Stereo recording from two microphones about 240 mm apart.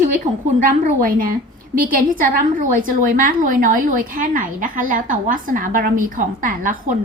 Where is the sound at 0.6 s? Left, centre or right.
Right.